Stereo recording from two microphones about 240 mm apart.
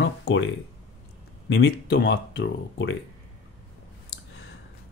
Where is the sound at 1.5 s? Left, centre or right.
Left.